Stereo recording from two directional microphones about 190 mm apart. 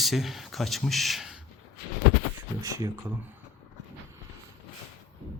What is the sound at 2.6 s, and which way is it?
Speech, 15° right (ahead or behind).